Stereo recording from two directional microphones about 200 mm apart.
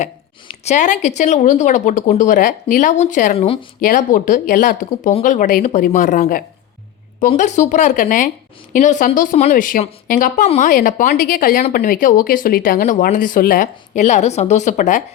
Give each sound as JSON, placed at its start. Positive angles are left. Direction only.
{"t": 0.6, "sound": "speech", "side_deg": 35}
{"t": 3.8, "sound": "speech", "side_deg": 40}